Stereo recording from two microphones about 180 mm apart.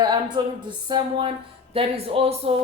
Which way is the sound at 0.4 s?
25° right (ahead or behind).